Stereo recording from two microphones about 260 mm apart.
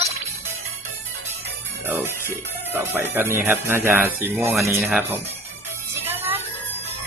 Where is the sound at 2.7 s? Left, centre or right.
Centre.